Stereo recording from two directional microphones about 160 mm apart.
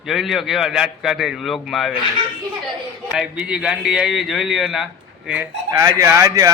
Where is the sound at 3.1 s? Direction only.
5° right (ahead or behind).